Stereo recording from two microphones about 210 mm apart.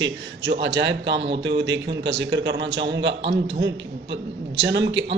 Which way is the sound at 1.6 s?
55° right (ahead or behind).